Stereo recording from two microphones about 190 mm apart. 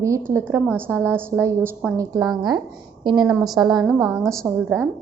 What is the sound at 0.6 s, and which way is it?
Speech, 5° left (ahead or behind).